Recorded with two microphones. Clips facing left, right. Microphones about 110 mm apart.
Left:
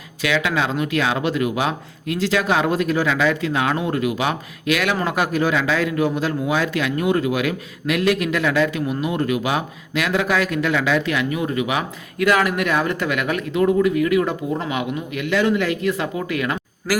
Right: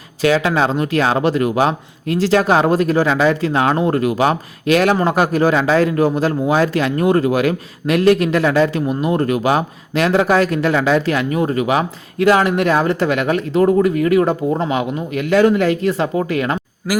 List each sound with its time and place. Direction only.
0.2 s speech: 40° right (ahead or behind)
16.9 s speech: 5° right (ahead or behind)